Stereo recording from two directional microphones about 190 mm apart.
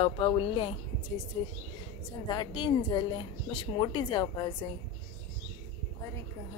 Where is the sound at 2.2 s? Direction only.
25° left (ahead or behind).